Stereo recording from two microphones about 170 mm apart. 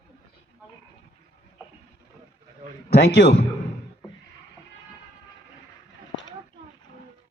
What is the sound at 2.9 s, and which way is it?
Speech, 75° left (ahead or behind).